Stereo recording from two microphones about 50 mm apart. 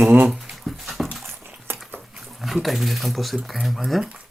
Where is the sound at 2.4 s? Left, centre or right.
Centre.